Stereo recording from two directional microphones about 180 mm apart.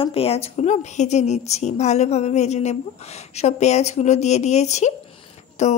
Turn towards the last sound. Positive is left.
turn(degrees=40)  # may be behind; listen again after turning